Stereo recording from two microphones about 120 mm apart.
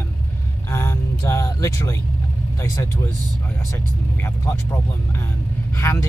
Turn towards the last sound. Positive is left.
turn(degrees=20)  # may be behind; listen again after turning